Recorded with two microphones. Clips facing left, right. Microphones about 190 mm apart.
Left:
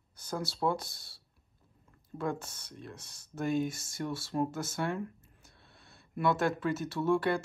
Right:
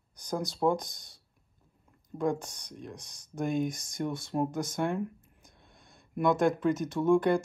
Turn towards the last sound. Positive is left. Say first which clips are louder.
# right 4 dB
turn(degrees=-15)  # may be behind; listen again after turning